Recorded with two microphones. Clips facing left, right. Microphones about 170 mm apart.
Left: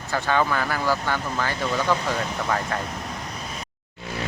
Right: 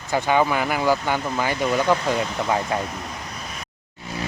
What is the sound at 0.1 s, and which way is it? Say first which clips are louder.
Speech: right 3 dB; 15° right (ahead or behind).